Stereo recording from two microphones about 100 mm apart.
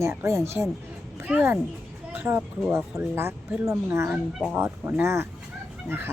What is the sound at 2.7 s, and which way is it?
A woman's voice, 25° right (ahead or behind).